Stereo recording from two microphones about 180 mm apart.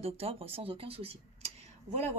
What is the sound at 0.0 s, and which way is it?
Speech, 35° right (ahead or behind).